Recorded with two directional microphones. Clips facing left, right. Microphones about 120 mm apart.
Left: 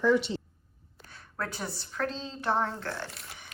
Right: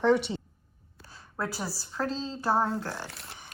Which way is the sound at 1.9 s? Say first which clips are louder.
Right 2 dB; 30° right (ahead or behind).